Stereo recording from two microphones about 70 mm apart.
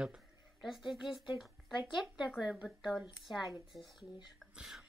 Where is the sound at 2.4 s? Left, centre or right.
Centre.